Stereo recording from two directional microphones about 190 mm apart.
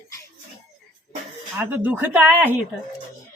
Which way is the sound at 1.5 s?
10° right (ahead or behind).